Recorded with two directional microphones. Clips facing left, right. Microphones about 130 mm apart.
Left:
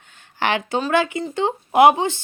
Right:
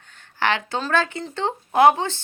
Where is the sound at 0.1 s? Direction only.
15° left (ahead or behind).